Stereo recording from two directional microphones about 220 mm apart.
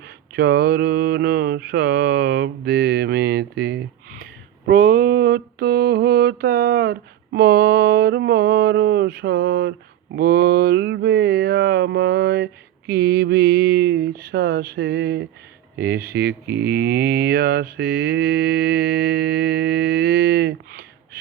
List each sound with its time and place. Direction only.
0.3 s speech: 50° right (ahead or behind)